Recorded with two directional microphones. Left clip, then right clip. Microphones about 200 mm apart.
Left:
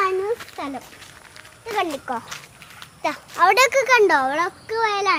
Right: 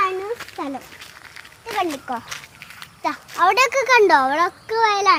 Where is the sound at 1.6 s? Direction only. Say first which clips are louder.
Even; 10° left (ahead or behind).